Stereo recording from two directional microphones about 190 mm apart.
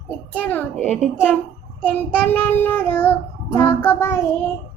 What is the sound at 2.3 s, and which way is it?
Child singing, 10° left (ahead or behind).